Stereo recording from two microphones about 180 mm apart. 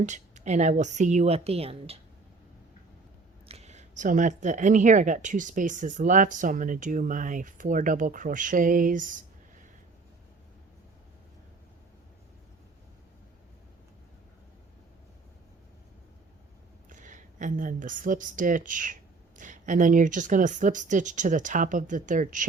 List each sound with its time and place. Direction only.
0.0 s speech: 40° right (ahead or behind)
3.5 s speech: 40° right (ahead or behind)
16.9 s speech: 45° right (ahead or behind)